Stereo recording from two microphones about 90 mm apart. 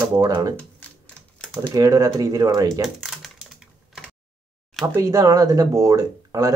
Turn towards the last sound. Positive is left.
turn(degrees=-40)  # may be behind; listen again after turning